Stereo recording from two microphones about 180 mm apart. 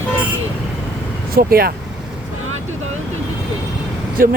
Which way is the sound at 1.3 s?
55° right (ahead or behind).